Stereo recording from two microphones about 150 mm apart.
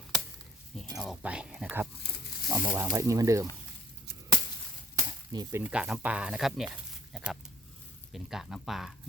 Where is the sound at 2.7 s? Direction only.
20° right (ahead or behind).